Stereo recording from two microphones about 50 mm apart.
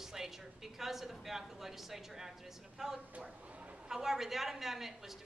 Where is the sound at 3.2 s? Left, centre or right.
Right.